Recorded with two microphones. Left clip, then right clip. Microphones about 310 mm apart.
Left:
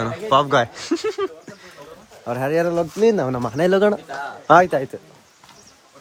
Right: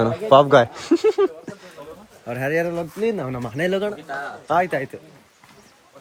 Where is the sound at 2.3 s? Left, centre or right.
Centre.